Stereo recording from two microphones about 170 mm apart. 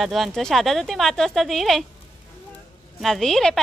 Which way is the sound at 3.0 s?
Centre (ahead or behind).